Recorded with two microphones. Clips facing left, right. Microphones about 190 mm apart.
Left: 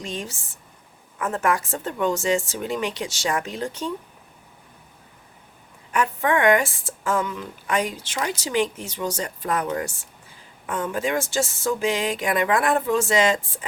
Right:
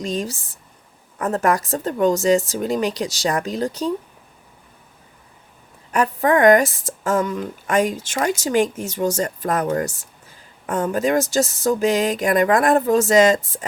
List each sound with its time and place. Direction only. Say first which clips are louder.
0.0 s speech: right 7 dB; 35° right (ahead or behind)
5.9 s speech: right 4 dB; 35° right (ahead or behind)